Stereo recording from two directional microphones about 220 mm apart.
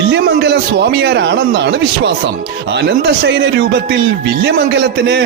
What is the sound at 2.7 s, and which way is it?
A man's voice, 50° right (ahead or behind).